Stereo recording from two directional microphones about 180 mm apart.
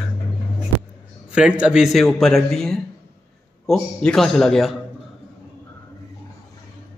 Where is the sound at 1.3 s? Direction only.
5° right (ahead or behind).